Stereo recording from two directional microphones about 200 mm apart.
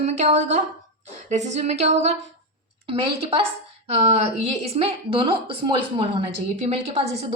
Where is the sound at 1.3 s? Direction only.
35° right (ahead or behind).